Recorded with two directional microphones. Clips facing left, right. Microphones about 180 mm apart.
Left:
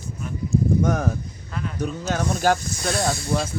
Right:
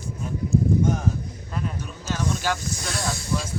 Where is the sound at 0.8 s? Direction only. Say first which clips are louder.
Left 1 dB; 70° left (ahead or behind); by 2.6 s 50° left (ahead or behind).